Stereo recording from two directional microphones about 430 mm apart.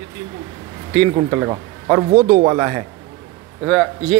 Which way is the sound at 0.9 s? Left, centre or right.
Centre.